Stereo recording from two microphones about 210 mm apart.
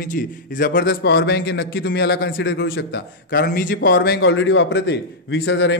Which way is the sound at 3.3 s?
45° left (ahead or behind).